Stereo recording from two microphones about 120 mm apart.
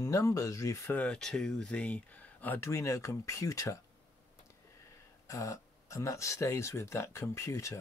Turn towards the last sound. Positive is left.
turn(degrees=25)  # may be behind; listen again after turning